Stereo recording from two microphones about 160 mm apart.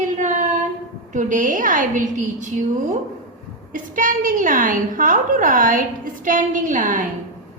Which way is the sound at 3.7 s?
55° right (ahead or behind).